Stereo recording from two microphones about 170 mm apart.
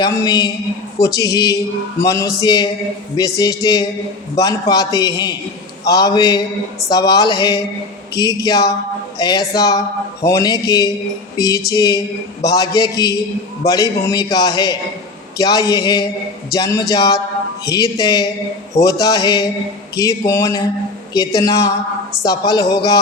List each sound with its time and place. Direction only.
0.0 s a man's voice: 20° left (ahead or behind)